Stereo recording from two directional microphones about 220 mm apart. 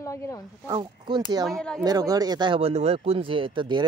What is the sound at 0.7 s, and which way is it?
Speech, 20° right (ahead or behind).